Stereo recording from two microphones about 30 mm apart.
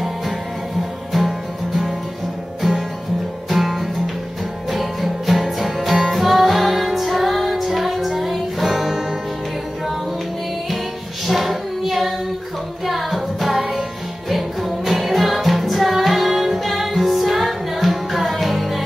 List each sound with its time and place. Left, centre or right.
3.4 s music: centre
11.2 s child singing: centre
12.8 s music: centre